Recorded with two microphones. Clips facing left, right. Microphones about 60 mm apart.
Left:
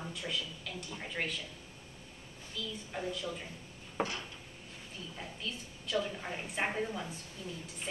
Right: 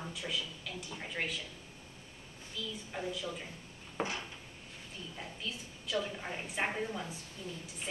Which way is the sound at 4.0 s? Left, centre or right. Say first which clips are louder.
Left 1 dB; centre.